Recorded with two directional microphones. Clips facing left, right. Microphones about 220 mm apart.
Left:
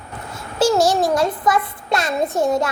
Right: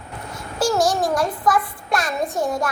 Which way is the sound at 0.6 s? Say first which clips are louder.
Left 3 dB; 25° left (ahead or behind).